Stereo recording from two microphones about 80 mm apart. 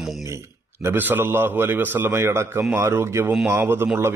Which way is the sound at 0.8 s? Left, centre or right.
Right.